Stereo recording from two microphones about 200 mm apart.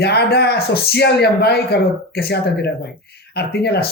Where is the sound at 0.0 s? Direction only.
55° left (ahead or behind).